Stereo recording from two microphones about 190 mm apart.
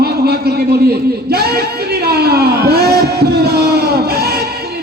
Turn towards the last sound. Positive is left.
turn(degrees=-55)  # may be behind; listen again after turning